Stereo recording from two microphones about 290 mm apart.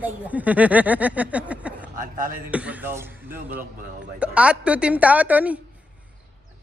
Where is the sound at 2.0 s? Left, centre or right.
Right.